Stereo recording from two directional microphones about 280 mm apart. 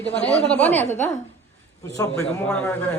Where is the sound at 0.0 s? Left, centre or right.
Centre.